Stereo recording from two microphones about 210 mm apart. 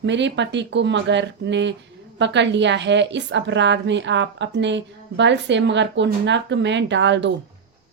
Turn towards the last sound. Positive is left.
turn(degrees=-60)  # may be behind; listen again after turning